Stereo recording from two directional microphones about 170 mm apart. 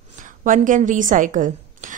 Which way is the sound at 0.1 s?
50° right (ahead or behind).